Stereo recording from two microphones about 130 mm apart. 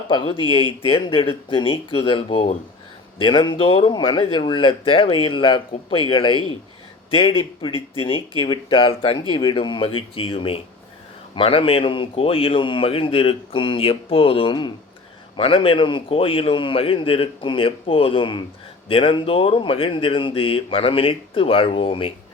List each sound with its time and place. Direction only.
0.1 s a man's voice: 40° left (ahead or behind)